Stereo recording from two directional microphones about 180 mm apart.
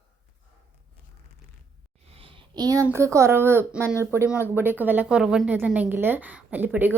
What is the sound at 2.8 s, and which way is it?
A woman's voice, 15° right (ahead or behind).